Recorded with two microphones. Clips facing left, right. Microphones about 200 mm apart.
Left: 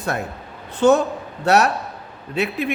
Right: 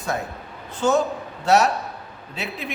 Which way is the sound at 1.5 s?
60° left (ahead or behind).